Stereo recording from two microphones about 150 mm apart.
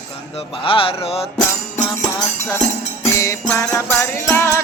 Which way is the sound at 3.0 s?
20° left (ahead or behind).